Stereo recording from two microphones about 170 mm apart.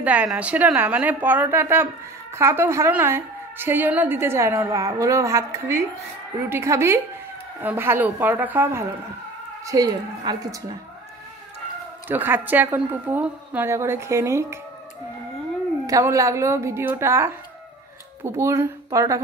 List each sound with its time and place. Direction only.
0.0 s a woman's voice: 10° right (ahead or behind)
9.7 s a woman's voice: 20° right (ahead or behind)
12.1 s a woman's voice: 10° right (ahead or behind)
15.9 s a woman's voice: 20° right (ahead or behind)